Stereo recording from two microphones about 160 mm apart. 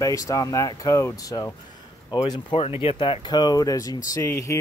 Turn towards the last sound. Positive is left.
turn(degrees=15)  # may be behind; listen again after turning